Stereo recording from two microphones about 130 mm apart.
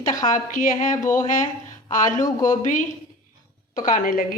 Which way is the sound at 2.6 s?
85° left.